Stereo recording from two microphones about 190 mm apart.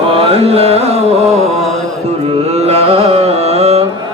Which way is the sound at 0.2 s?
30° right (ahead or behind).